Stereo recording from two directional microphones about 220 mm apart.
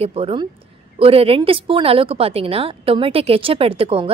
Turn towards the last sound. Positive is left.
turn(degrees=-25)  # may be behind; listen again after turning